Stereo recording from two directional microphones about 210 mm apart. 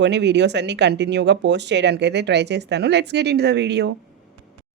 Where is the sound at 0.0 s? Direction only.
55° right (ahead or behind).